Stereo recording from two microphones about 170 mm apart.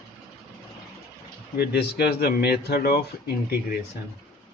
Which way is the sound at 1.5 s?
70° left (ahead or behind).